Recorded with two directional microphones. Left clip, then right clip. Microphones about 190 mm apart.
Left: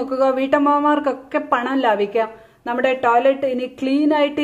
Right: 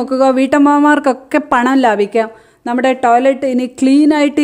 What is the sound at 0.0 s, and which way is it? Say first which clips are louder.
Speech: right 6 dB; 55° right (ahead or behind).